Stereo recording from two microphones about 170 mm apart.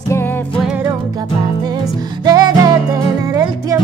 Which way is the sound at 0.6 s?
5° right (ahead or behind).